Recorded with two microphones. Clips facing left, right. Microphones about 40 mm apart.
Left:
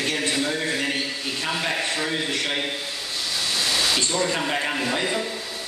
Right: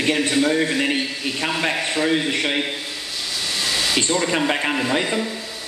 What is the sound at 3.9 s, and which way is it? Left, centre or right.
Speech, right.